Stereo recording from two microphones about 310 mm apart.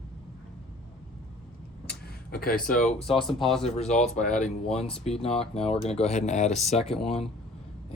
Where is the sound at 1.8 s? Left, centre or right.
Left.